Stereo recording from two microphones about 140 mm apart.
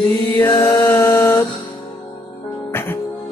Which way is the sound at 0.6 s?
20° left (ahead or behind).